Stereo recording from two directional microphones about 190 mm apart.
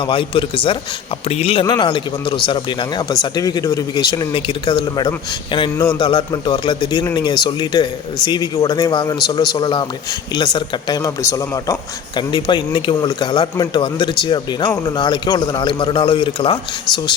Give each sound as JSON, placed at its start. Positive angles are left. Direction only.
{"t": 0.0, "sound": "a man's voice", "side_deg": 30}
{"t": 5.7, "sound": "a man's voice", "side_deg": 15}
{"t": 6.0, "sound": "a man's voice", "side_deg": 25}